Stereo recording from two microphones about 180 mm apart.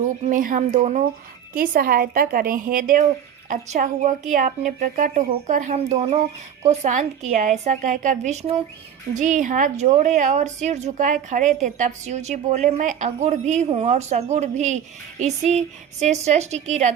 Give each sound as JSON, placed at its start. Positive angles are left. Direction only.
{"t": 0.0, "sound": "a woman's voice", "side_deg": -45}
{"t": 1.5, "sound": "a woman's voice", "side_deg": -50}